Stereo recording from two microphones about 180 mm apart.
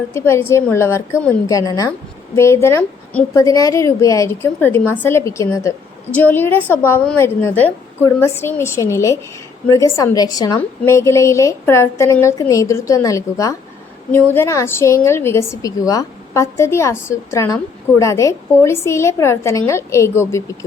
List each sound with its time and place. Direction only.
0.1 s a woman's voice: 15° left (ahead or behind)